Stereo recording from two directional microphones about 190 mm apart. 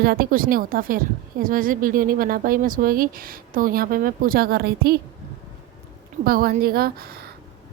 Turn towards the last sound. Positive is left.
turn(degrees=-55)  # may be behind; listen again after turning